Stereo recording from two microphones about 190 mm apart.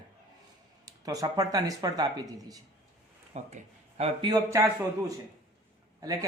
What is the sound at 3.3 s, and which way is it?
Speech, 35° right (ahead or behind).